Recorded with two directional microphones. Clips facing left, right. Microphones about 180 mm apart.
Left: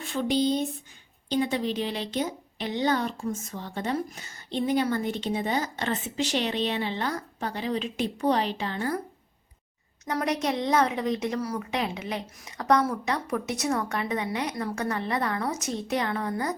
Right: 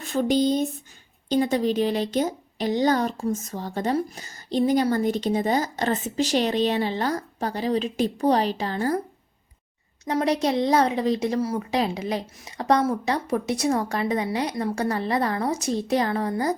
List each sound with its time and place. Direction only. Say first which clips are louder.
0.0 s a woman's voice: right 4 dB; 45° right (ahead or behind)
10.1 s a woman's voice: right 5 dB; 30° right (ahead or behind)